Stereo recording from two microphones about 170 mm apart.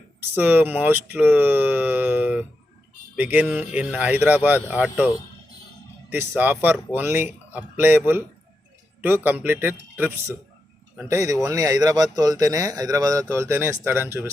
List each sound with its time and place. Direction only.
0.2 s speech: 10° right (ahead or behind)